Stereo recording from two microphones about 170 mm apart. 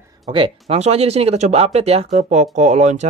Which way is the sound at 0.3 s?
30° right (ahead or behind).